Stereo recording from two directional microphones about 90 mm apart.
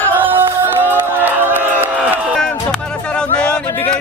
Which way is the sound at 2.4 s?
10° left (ahead or behind).